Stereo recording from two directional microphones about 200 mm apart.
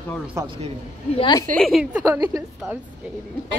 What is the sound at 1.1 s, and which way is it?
Speech, 20° left (ahead or behind).